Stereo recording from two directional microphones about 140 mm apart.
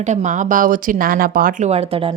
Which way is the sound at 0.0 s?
55° right (ahead or behind).